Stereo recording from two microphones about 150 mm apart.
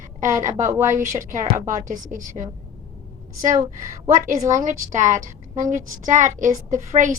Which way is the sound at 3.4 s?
60° right (ahead or behind).